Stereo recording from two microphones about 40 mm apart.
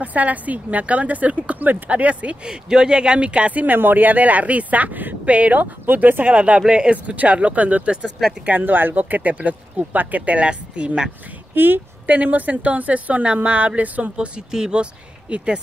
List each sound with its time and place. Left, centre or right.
0.0 s speech: right
2.4 s speech: centre
3.6 s speech: right
5.9 s speech: right
6.3 s speech: right
8.5 s speech: right
11.5 s a woman's voice: right
12.2 s speech: right
14.1 s speech: right